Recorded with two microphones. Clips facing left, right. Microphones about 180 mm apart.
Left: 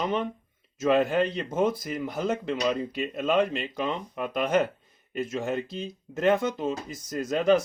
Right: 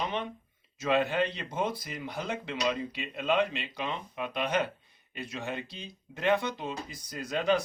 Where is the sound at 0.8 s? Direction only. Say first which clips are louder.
Left 5 dB; 45° left (ahead or behind).